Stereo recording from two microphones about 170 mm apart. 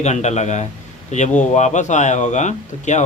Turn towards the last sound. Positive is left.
turn(degrees=45)  # may be behind; listen again after turning